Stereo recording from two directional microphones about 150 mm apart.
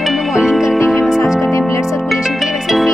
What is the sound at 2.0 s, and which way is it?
Music, centre (ahead or behind).